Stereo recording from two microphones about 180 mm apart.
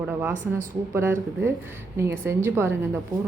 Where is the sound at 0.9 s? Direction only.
15° right (ahead or behind).